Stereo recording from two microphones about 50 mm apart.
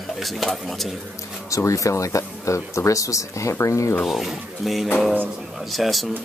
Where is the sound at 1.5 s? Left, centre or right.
Left.